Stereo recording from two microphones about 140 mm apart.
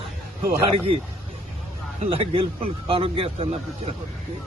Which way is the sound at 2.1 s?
40° right (ahead or behind).